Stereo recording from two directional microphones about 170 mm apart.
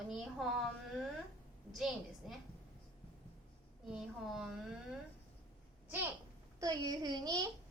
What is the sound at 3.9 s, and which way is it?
A woman's voice, centre (ahead or behind).